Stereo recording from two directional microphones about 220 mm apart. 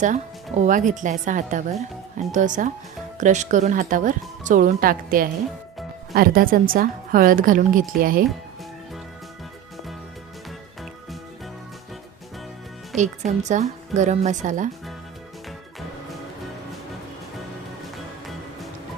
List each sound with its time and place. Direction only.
0.5 s speech: 35° right (ahead or behind)
13.4 s speech: 35° right (ahead or behind)